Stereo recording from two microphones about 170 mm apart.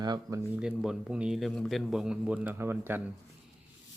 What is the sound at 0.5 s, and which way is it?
Speech, 5° right (ahead or behind).